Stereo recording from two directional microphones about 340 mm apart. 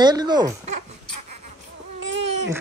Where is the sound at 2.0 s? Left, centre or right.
Right.